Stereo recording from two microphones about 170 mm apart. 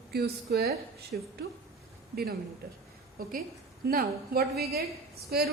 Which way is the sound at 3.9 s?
60° right (ahead or behind).